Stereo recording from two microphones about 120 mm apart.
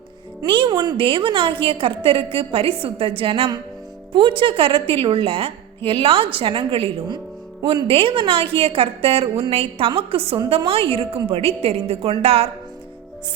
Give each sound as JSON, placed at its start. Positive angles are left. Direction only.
{"t": 0.4, "sound": "a woman's voice", "side_deg": -45}